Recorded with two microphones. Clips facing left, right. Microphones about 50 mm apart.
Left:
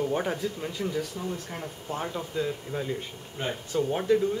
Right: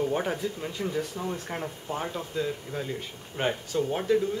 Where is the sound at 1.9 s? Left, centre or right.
Centre.